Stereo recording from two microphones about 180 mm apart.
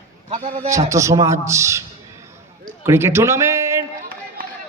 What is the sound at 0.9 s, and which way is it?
Speech, 15° right (ahead or behind).